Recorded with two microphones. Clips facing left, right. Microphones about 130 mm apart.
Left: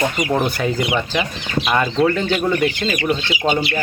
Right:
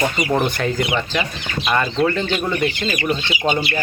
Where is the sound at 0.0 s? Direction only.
Centre (ahead or behind); by 3.2 s 15° left (ahead or behind).